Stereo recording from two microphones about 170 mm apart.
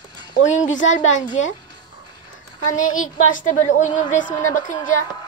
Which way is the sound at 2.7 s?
50° left (ahead or behind).